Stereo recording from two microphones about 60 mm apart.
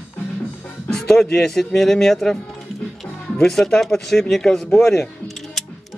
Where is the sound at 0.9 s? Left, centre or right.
Centre.